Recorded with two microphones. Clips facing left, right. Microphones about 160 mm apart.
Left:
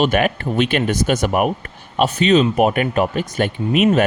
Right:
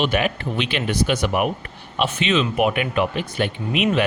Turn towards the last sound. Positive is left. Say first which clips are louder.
# left 5 dB
turn(degrees=45)  # may be behind; listen again after turning